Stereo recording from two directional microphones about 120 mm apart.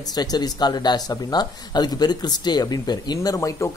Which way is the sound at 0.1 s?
35° left (ahead or behind).